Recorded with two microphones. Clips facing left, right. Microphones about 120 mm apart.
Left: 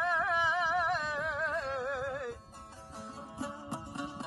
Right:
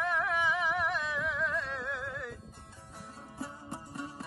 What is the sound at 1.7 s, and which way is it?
Music, 35° left (ahead or behind).